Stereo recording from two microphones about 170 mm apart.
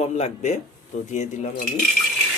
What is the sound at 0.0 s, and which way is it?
Speech, 40° left (ahead or behind).